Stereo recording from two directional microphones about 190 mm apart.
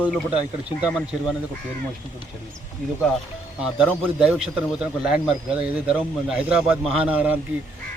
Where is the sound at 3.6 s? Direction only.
5° right (ahead or behind).